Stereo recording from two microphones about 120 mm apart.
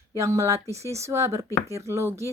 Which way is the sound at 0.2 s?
25° right (ahead or behind).